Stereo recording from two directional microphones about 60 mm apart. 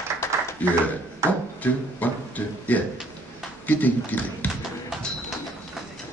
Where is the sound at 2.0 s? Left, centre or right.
Left.